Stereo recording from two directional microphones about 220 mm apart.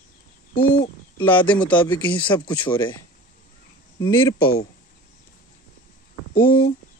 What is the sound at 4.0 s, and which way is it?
Speech, 10° left (ahead or behind).